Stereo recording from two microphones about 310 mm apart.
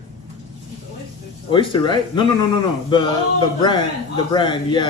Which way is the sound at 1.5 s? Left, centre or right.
Centre.